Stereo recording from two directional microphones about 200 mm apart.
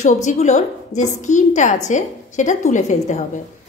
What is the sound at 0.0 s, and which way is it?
A woman's voice, 35° left (ahead or behind).